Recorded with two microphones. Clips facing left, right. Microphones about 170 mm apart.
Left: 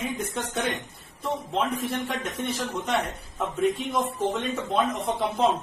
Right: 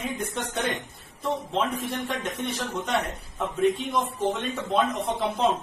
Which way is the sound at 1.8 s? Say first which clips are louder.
Left 1 dB; centre (ahead or behind).